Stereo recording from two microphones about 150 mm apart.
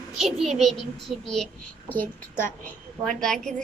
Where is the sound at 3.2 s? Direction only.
5° left (ahead or behind).